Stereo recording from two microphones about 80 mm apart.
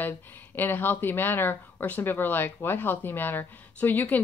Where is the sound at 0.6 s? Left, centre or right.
Left.